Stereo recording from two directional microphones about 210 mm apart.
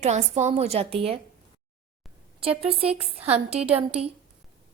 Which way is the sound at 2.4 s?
25° right (ahead or behind).